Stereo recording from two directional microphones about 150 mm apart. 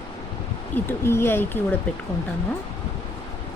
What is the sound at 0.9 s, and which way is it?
Speech, 15° left (ahead or behind).